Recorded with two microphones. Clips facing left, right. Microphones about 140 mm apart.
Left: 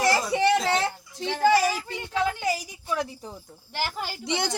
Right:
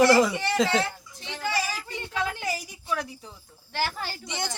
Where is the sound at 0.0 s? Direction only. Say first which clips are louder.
Right 6 dB; 90° right.